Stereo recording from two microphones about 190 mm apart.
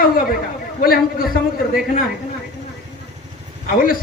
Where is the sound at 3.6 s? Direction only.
50° left (ahead or behind).